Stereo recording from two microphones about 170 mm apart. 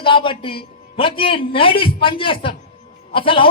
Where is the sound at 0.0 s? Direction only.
30° left (ahead or behind).